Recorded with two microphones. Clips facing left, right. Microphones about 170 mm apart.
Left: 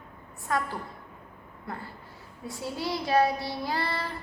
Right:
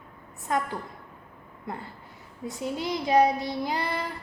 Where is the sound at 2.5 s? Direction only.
20° right (ahead or behind).